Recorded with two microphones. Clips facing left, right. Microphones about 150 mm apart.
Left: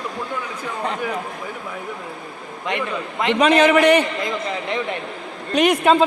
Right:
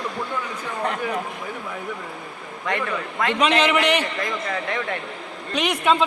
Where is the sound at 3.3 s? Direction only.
45° left (ahead or behind).